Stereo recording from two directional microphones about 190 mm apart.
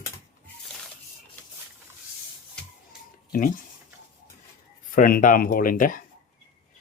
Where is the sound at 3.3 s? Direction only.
45° left (ahead or behind).